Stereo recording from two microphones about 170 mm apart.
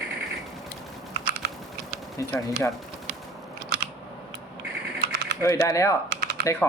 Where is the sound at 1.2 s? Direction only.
75° right (ahead or behind).